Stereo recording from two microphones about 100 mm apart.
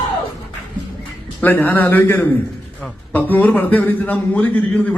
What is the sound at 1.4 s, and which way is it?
A man's voice, 15° left (ahead or behind).